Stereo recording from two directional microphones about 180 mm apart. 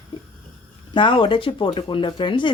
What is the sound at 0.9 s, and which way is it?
Speech, 25° left (ahead or behind).